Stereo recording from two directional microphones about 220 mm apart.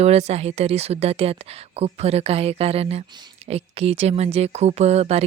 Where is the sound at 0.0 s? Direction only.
30° right (ahead or behind).